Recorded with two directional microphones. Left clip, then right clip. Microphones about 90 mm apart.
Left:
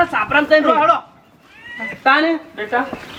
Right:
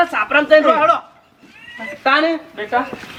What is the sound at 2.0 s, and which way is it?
Speech, 10° right (ahead or behind).